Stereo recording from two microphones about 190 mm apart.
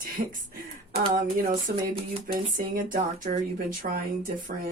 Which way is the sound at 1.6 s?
30° right (ahead or behind).